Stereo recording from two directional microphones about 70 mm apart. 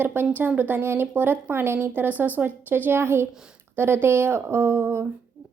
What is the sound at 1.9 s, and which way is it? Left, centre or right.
A woman's voice, right.